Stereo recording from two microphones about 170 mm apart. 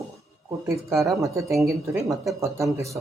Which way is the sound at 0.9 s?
Centre (ahead or behind).